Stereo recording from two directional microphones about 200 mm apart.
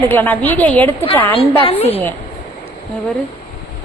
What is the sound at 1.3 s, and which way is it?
Speech, 30° left (ahead or behind).